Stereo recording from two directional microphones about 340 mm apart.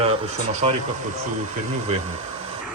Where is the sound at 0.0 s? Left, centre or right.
Centre.